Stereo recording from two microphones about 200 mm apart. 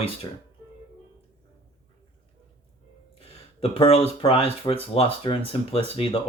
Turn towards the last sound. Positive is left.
turn(degrees=25)  # may be behind; listen again after turning